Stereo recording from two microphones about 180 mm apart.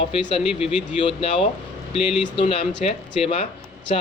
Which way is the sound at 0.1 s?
30° left (ahead or behind).